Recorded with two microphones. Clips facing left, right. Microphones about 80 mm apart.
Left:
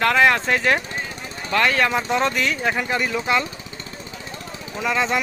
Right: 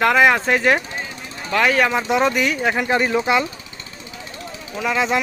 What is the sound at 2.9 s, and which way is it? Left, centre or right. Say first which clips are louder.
Speech: right 6 dB; right.